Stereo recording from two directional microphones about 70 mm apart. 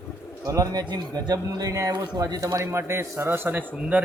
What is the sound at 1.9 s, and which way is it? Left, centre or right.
Speech, right.